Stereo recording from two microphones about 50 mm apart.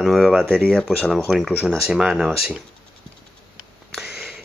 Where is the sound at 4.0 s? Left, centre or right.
Centre.